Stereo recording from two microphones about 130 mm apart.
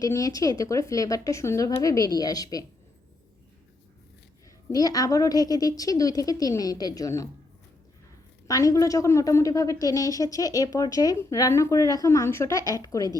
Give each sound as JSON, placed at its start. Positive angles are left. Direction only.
{"t": 0.0, "sound": "a woman's voice", "side_deg": 25}
{"t": 4.7, "sound": "a woman's voice", "side_deg": 30}
{"t": 8.4, "sound": "a woman's voice", "side_deg": 25}